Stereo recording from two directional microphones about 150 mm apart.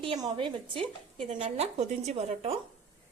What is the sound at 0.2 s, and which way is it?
Speech, 35° right (ahead or behind).